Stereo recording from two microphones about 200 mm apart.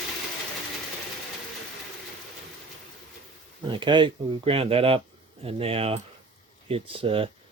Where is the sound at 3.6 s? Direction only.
25° right (ahead or behind).